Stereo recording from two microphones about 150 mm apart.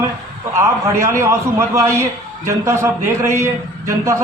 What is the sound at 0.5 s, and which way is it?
A man's voice, 20° right (ahead or behind).